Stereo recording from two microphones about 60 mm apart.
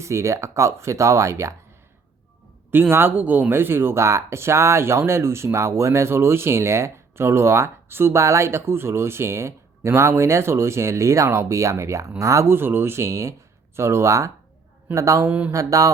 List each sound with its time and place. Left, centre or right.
0.0 s speech: right
2.7 s speech: right
3.2 s speech: right
3.5 s speech: right
12.5 s speech: right
15.3 s speech: right
15.5 s mantra: right